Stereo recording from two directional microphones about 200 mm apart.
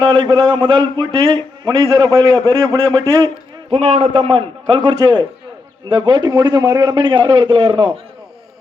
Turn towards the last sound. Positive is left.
turn(degrees=-25)  # may be behind; listen again after turning